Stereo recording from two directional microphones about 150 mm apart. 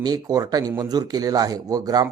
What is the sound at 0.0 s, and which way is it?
Speech, 25° right (ahead or behind).